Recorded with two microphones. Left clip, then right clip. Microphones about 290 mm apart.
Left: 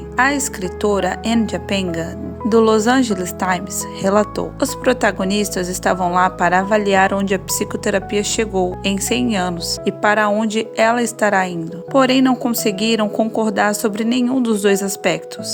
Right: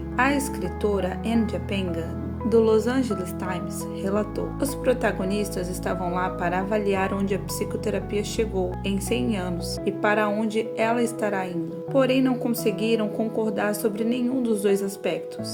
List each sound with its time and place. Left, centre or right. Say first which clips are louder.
0.2 s speech: left 6 dB; left